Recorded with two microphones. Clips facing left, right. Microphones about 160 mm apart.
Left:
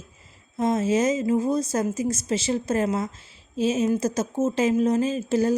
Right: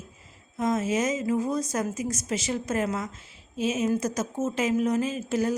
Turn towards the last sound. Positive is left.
turn(degrees=30)  # may be behind; listen again after turning